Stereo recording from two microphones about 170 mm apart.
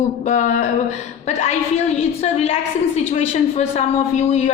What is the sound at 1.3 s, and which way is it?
A man's voice, 40° left (ahead or behind).